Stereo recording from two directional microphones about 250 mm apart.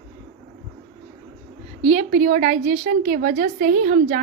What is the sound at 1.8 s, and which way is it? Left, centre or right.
A woman's voice, right.